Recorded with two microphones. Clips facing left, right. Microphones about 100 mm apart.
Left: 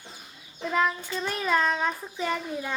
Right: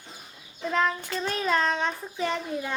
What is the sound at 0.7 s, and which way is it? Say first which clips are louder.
A child's voice: even; 5° left (ahead or behind).